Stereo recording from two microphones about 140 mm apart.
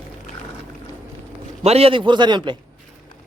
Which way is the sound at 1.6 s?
45° right (ahead or behind).